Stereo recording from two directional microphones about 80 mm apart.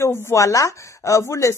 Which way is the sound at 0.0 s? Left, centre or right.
Left.